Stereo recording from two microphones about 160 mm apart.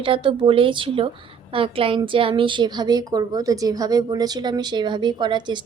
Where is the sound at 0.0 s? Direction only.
35° right (ahead or behind).